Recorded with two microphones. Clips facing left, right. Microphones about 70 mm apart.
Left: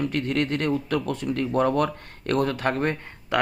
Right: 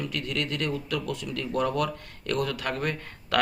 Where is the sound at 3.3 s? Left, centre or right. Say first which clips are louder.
Left 2 dB; centre.